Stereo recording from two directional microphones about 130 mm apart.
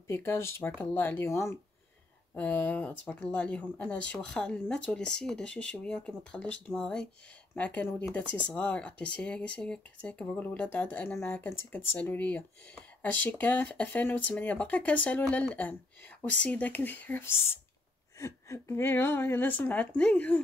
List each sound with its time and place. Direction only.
0.1 s speech: 20° left (ahead or behind)